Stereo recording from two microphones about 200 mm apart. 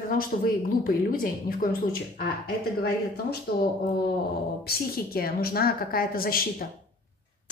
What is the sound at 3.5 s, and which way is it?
Speech, 50° left (ahead or behind).